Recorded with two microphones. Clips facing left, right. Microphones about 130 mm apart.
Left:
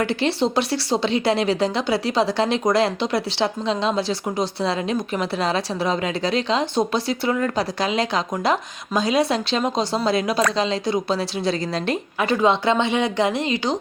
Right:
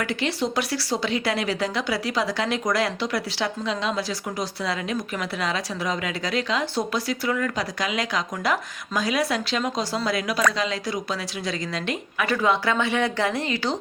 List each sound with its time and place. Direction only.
0.0 s a woman's voice: 30° left (ahead or behind)